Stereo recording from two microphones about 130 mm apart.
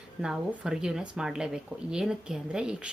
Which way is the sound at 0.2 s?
5° right (ahead or behind).